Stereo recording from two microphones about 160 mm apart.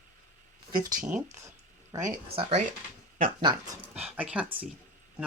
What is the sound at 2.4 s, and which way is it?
Speech, 35° right (ahead or behind).